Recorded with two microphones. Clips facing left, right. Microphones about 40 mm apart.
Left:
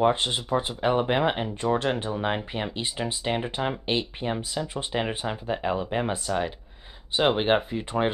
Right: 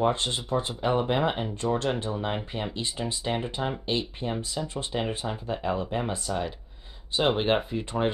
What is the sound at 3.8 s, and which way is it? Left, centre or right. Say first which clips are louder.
Speech: left 2 dB; left.